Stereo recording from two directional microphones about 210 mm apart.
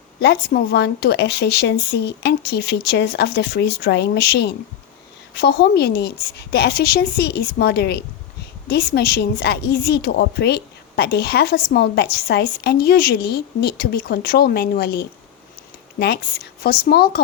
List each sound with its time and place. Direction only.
0.2 s a woman's voice: 50° left (ahead or behind)